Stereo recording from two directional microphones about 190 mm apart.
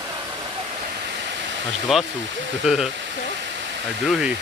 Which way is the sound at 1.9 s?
Centre (ahead or behind).